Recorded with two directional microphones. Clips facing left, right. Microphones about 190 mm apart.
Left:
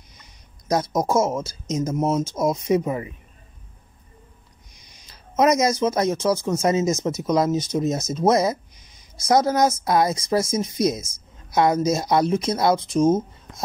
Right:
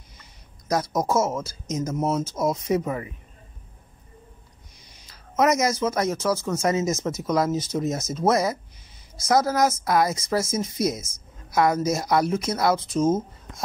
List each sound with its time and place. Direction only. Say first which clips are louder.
0.2 s speech: even; 20° left (ahead or behind)
4.7 s speech: left 1 dB; 20° left (ahead or behind)